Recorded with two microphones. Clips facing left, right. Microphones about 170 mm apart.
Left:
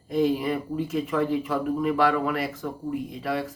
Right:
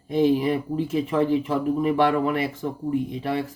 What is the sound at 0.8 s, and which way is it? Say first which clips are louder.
Speech: right 2 dB; 30° right (ahead or behind).